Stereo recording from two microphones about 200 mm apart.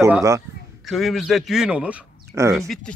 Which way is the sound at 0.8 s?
Centre (ahead or behind).